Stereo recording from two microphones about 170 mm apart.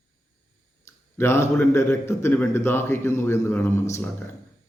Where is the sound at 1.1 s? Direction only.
15° left (ahead or behind).